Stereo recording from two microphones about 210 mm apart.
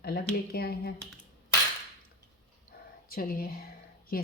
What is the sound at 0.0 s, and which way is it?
Speech, 50° left (ahead or behind).